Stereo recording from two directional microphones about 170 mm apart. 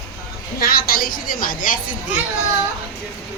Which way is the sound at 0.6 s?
60° left (ahead or behind).